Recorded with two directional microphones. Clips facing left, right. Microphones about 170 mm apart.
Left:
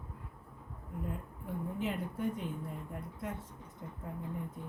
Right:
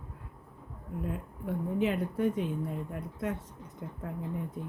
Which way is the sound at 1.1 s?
85° right.